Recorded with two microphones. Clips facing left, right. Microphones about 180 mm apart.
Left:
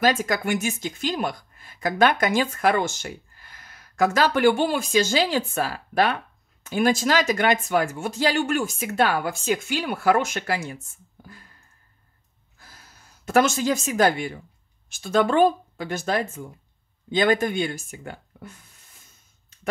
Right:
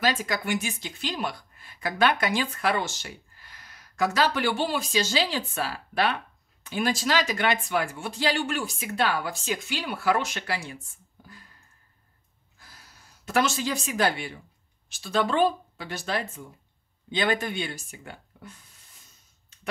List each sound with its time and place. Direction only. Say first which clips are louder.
0.0 s a woman's voice: left 5 dB; 45° left (ahead or behind)
12.5 s a sound: left 2 dB; 45° left (ahead or behind)
14.9 s a woman's voice: left 5 dB; 50° left (ahead or behind)